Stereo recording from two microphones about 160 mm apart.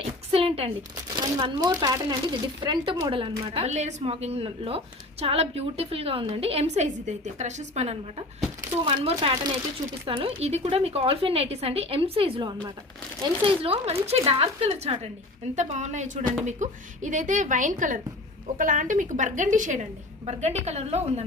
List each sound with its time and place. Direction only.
0.0 s a sound: 35° right (ahead or behind)
1.1 s a woman's voice: 30° right (ahead or behind); by 7.9 s 45° right (ahead or behind)
8.8 s a woman's voice: 30° right (ahead or behind)